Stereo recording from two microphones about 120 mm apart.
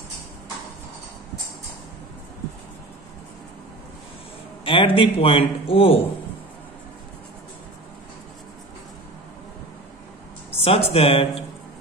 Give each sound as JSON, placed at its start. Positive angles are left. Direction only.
{"t": 4.6, "sound": "a man's voice", "side_deg": 45}
{"t": 10.6, "sound": "speech", "side_deg": 55}